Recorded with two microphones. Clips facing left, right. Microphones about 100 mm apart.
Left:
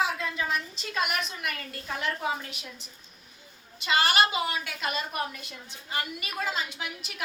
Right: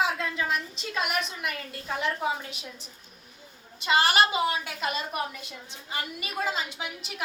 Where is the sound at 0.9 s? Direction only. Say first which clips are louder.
Even; 25° right (ahead or behind).